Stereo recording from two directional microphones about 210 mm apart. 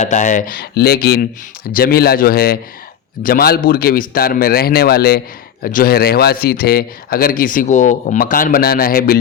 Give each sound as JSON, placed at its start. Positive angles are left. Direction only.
{"t": 0.0, "sound": "a man's voice", "side_deg": 35}